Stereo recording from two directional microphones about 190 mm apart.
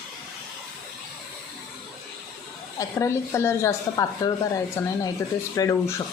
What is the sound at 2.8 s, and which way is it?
A woman's voice, 15° left (ahead or behind).